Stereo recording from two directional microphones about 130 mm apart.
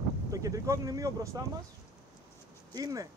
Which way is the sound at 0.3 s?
25° right (ahead or behind).